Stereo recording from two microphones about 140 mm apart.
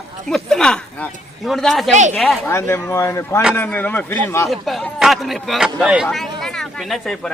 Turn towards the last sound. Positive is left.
turn(degrees=0)  # may be behind; listen again after turning